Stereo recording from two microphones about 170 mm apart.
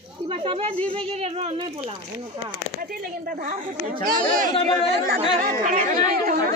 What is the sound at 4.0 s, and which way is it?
Speech, 55° right (ahead or behind).